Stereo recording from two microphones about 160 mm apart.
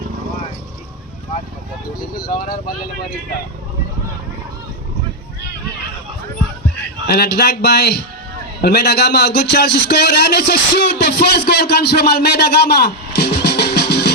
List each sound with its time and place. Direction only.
2.1 s speech: 65° left (ahead or behind)
7.1 s speech: 90° left